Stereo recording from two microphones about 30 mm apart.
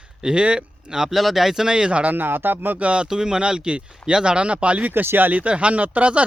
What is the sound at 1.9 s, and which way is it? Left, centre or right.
Speech, right.